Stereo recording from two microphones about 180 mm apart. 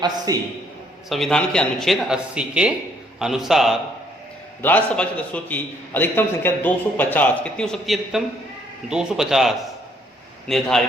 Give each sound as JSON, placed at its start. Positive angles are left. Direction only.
{"t": 0.3, "sound": "a man's voice", "side_deg": -20}
{"t": 1.1, "sound": "a man's voice", "side_deg": 0}